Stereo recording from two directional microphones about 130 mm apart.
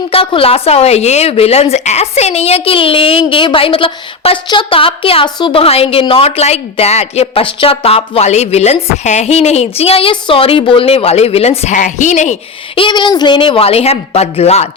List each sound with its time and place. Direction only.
0.1 s a woman's voice: 45° left (ahead or behind)
11.8 s speech: 70° left (ahead or behind)
12.7 s a woman's voice: 40° left (ahead or behind); by 14.7 s 55° left (ahead or behind)